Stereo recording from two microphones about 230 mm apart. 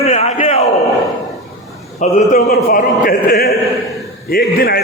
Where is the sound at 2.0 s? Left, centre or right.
Left.